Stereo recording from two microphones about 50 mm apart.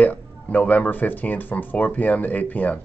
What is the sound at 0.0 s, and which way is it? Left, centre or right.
Speech, left.